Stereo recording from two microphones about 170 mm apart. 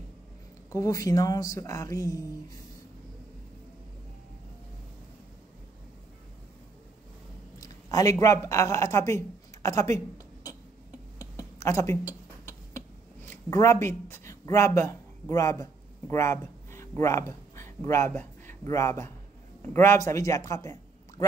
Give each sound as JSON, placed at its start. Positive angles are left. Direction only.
{"t": 0.7, "sound": "speech", "side_deg": 20}
{"t": 7.6, "sound": "speech", "side_deg": 20}
{"t": 11.1, "sound": "a sound", "side_deg": 20}
{"t": 19.6, "sound": "a man's voice", "side_deg": 15}